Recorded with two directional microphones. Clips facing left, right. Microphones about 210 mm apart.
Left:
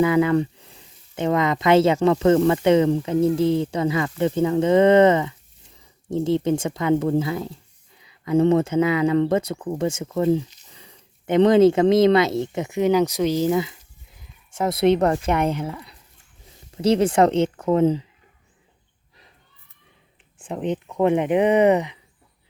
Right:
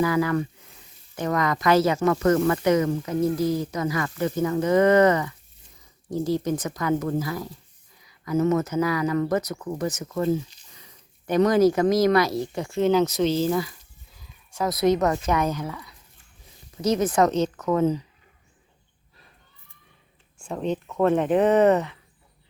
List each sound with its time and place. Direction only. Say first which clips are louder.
0.0 s speech: left 5 dB; 20° left (ahead or behind)
20.4 s speech: left 2 dB; 20° left (ahead or behind)